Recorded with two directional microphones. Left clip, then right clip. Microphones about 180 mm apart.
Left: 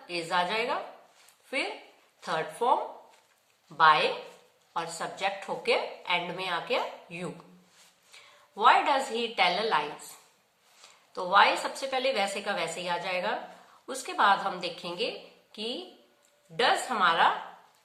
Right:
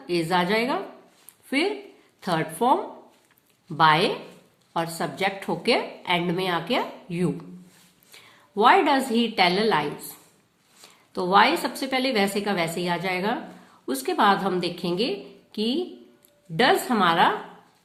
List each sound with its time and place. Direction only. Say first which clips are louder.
0.1 s a woman's voice: right 6 dB; 35° right (ahead or behind)
3.8 s a woman's voice: right 3 dB; 40° right (ahead or behind)